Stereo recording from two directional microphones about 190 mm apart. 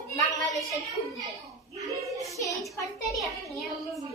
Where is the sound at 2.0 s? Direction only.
15° right (ahead or behind).